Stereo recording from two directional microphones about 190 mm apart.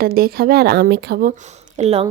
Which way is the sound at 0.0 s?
50° right (ahead or behind).